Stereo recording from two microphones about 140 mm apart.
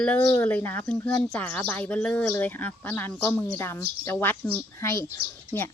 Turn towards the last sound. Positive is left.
turn(degrees=20)  # may be behind; listen again after turning